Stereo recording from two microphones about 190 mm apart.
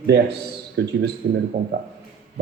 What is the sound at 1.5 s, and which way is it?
Speech, 55° right (ahead or behind).